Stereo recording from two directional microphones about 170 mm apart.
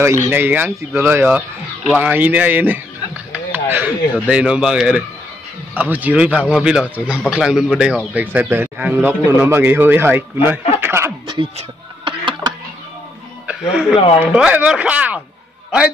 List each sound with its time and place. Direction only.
0.3 s a man's voice: 10° right (ahead or behind)
10.8 s chuckle: 15° right (ahead or behind)
11.2 s music: 30° right (ahead or behind)
13.5 s a man's voice: 5° right (ahead or behind)